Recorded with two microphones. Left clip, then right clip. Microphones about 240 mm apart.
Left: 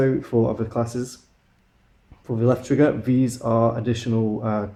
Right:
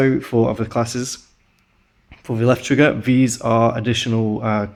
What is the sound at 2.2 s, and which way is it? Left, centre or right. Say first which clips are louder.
Speech: right 4 dB; right.